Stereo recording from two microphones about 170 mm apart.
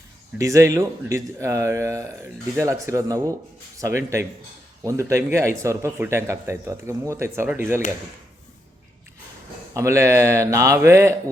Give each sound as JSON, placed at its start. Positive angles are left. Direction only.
{"t": 0.3, "sound": "a man's voice", "side_deg": -20}
{"t": 9.7, "sound": "a man's voice", "side_deg": -15}